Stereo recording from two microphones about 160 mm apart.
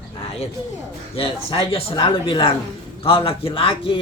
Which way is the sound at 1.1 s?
35° left (ahead or behind).